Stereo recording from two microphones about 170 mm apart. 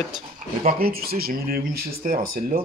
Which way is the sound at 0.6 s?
60° right (ahead or behind).